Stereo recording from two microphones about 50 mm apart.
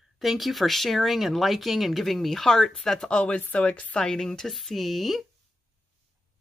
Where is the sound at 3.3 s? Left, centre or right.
Left.